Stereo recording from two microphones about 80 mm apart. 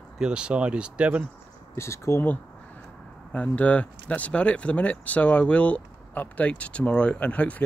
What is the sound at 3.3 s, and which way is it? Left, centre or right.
Speech, centre.